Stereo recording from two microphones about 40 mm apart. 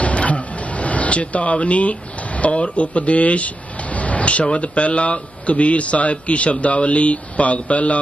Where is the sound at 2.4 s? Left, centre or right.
Left.